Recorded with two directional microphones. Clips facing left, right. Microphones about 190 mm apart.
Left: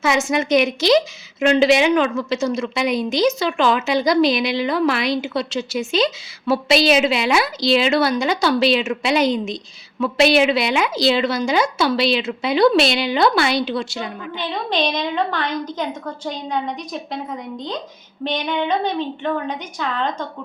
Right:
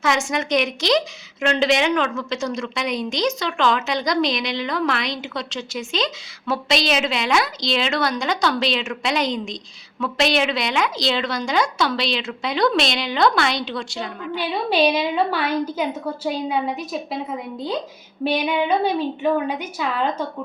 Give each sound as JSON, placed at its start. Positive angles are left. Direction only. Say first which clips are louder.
{"t": 0.0, "sound": "a woman's voice", "louder": "left 3 dB", "side_deg": 5}
{"t": 14.3, "sound": "a woman's voice", "louder": "right 3 dB", "side_deg": -10}